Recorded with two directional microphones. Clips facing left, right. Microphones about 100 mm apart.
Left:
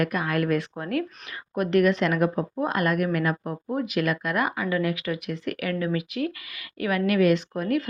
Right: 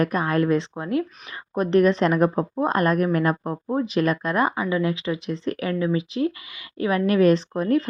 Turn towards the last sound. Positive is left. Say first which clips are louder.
# right 4 dB
turn(degrees=-30)  # may be behind; listen again after turning